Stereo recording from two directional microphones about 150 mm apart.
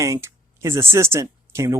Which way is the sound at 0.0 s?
20° right (ahead or behind).